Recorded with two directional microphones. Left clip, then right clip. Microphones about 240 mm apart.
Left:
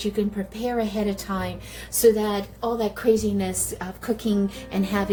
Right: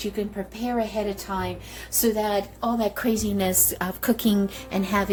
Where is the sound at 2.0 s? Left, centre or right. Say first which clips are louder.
Left 4 dB; centre.